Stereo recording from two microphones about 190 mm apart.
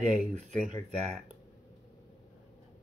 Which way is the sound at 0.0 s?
35° right (ahead or behind).